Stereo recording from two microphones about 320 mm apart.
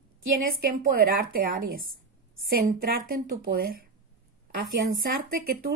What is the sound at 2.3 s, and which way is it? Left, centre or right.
Speech, right.